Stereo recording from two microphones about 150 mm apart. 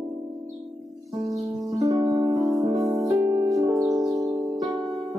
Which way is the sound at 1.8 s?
25° right (ahead or behind).